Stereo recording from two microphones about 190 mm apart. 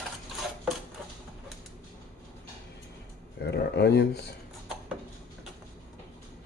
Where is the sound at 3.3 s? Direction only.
60° left (ahead or behind).